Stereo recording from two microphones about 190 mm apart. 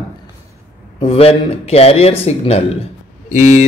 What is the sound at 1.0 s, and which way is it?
Speech, 30° left (ahead or behind).